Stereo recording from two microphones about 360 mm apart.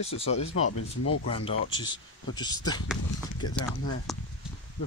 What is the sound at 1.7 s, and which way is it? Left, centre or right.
Speech, centre.